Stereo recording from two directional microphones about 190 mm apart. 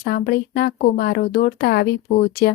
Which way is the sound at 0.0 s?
55° left (ahead or behind).